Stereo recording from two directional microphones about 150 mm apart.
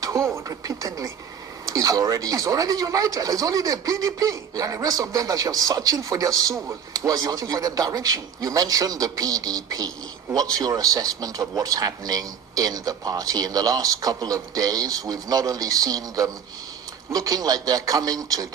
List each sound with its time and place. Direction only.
0.0 s speech: 20° right (ahead or behind)